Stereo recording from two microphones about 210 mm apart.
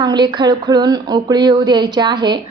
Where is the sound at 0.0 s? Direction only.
20° right (ahead or behind).